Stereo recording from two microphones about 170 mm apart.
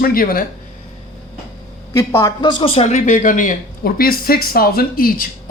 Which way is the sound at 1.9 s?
20° left (ahead or behind).